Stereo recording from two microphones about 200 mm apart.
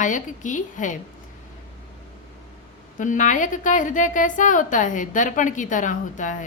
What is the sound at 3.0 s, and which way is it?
A woman's voice, 40° left (ahead or behind).